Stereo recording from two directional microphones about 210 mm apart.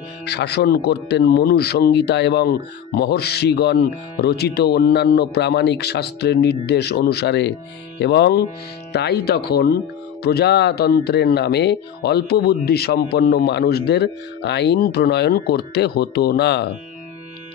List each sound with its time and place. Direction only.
0.2 s speech: 50° left (ahead or behind)